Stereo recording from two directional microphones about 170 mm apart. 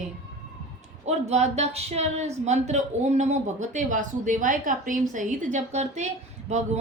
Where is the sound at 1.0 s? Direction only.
40° right (ahead or behind).